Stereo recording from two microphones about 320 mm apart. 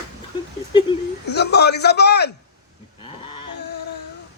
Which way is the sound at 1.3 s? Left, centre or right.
Left.